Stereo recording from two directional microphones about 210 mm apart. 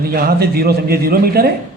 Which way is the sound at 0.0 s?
45° right (ahead or behind).